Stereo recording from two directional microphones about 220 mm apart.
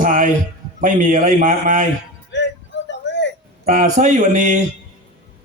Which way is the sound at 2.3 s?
50° left (ahead or behind).